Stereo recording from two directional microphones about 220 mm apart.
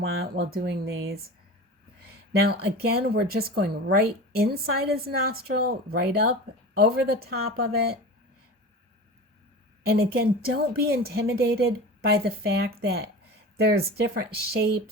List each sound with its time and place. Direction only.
0.3 s a woman's voice: 45° right (ahead or behind)
2.4 s a woman's voice: 45° right (ahead or behind)
10.0 s a woman's voice: 45° right (ahead or behind)